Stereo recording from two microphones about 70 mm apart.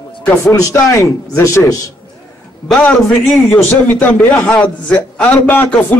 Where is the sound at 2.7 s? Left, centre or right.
Centre.